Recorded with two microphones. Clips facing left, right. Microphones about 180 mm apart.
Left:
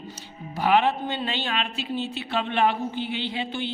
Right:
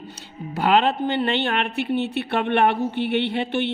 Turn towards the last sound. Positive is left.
turn(degrees=-65)  # may be behind; listen again after turning